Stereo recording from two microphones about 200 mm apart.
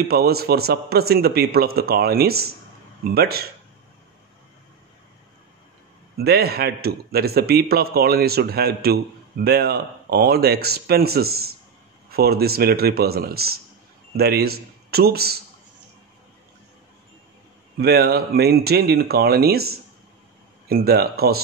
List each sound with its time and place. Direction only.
0.1 s a man's voice: 50° right (ahead or behind)
6.1 s a man's voice: 50° right (ahead or behind)
17.7 s a man's voice: 50° right (ahead or behind)